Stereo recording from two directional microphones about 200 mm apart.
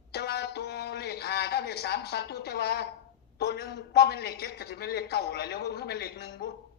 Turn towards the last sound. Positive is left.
turn(degrees=55)  # may be behind; listen again after turning